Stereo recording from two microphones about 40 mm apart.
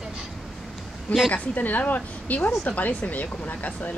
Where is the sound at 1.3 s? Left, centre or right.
Left.